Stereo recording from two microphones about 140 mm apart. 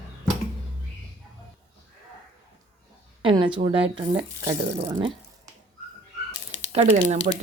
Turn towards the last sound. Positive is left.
turn(degrees=-65)  # may be behind; listen again after turning